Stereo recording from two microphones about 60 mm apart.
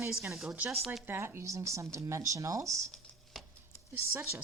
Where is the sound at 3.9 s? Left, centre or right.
Right.